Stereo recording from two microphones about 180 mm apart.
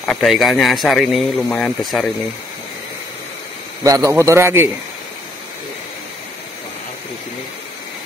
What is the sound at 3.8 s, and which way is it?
Speech, 20° right (ahead or behind).